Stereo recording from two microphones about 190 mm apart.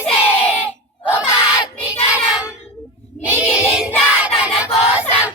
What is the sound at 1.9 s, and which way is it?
Child singing, 5° right (ahead or behind).